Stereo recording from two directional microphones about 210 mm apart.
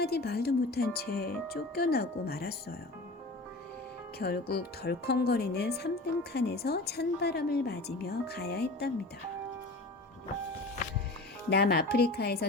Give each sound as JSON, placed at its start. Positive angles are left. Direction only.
{"t": 0.0, "sound": "speech", "side_deg": 50}
{"t": 4.2, "sound": "speech", "side_deg": 50}
{"t": 11.4, "sound": "speech", "side_deg": 50}